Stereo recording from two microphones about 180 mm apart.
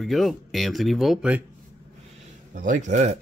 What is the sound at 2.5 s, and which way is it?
Speech, 45° right (ahead or behind).